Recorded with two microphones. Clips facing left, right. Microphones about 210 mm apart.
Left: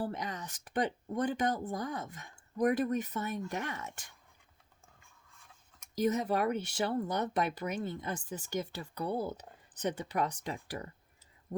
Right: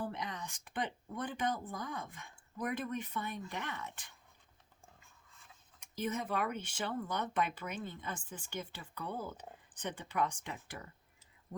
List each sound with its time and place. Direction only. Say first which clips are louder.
0.0 s speech: left 4 dB; 40° left (ahead or behind)
5.9 s speech: left 7 dB; 40° left (ahead or behind)